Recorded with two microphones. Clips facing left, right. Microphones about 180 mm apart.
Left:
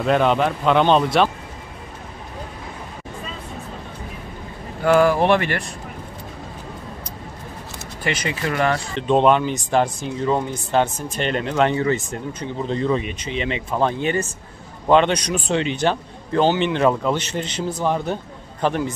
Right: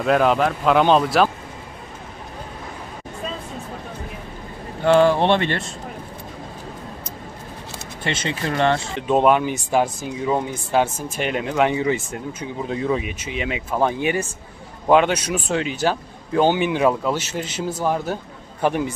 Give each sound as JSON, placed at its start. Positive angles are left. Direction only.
{"t": 0.0, "sound": "speech", "side_deg": 0}
{"t": 4.8, "sound": "speech", "side_deg": -25}
{"t": 8.0, "sound": "speech", "side_deg": -25}
{"t": 8.9, "sound": "speech", "side_deg": -10}